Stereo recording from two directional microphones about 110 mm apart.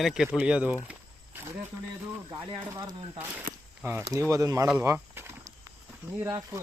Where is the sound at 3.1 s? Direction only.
15° right (ahead or behind).